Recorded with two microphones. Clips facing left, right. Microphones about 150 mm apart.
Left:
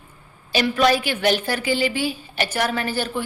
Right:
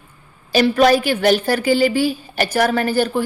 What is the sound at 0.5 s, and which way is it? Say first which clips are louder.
A woman's voice: right 5 dB; 40° right (ahead or behind).